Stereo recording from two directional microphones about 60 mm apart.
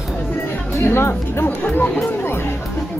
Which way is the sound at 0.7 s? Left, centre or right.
Left.